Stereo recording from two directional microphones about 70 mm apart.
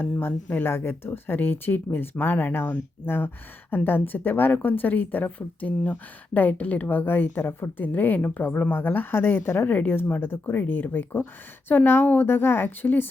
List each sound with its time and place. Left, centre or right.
0.0 s speech: left